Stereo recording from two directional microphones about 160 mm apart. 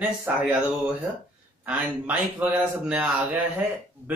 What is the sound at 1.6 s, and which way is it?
Speech, 10° right (ahead or behind).